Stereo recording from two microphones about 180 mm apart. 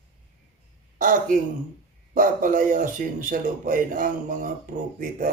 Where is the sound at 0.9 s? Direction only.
50° right (ahead or behind).